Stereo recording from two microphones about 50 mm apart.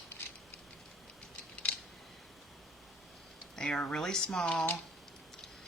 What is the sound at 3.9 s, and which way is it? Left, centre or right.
Speech, centre.